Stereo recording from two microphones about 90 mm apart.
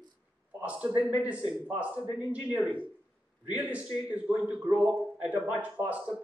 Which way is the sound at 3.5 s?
15° right (ahead or behind).